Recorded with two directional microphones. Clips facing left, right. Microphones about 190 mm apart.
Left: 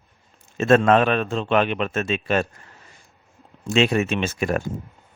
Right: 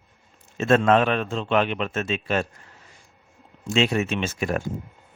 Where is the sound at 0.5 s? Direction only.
55° left (ahead or behind).